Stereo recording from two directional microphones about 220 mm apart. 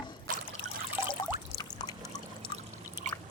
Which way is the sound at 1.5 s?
Centre (ahead or behind).